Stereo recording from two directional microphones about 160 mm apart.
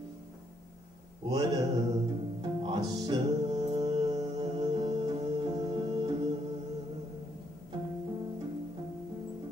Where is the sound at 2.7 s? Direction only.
25° right (ahead or behind).